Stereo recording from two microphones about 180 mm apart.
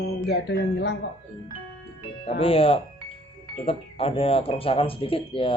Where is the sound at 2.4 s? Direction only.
30° left (ahead or behind).